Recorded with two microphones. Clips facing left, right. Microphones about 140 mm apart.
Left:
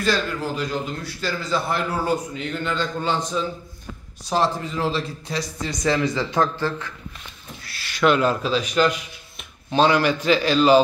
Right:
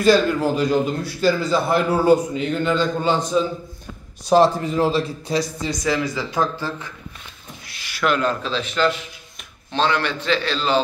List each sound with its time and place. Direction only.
0.0 s a man's voice: 10° right (ahead or behind)
7.6 s a sound: 15° right (ahead or behind)
8.0 s a man's voice: 5° left (ahead or behind)